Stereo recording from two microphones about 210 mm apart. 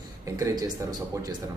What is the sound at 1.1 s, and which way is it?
Speech, 15° right (ahead or behind).